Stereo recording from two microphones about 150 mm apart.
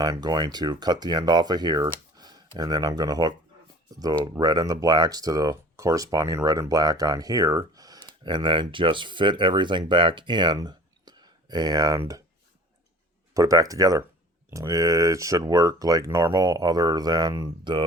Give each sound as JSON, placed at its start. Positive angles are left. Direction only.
{"t": 0.0, "sound": "speech", "side_deg": -25}
{"t": 13.3, "sound": "speech", "side_deg": -20}